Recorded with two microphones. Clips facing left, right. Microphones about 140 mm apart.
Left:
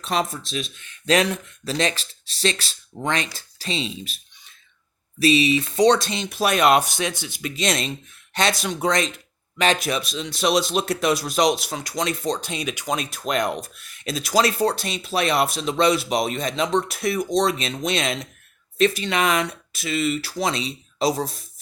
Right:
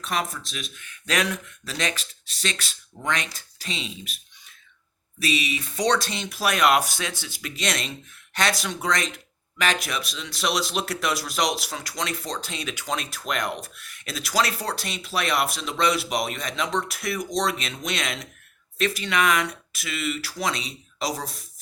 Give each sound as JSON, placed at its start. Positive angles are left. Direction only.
{"t": 0.0, "sound": "speech", "side_deg": 25}
{"t": 5.2, "sound": "speech", "side_deg": 30}